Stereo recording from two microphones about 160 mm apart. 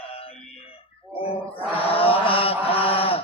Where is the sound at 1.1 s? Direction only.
35° left (ahead or behind).